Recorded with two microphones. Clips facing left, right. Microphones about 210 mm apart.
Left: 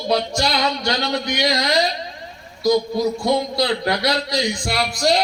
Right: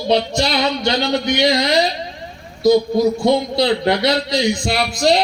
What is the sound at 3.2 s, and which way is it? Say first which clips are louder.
Speech: right 4 dB; 25° right (ahead or behind).